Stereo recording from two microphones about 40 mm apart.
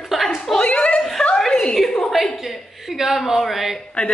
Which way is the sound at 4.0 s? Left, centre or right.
Left.